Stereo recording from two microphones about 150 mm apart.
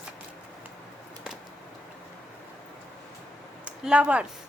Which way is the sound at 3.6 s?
5° right (ahead or behind).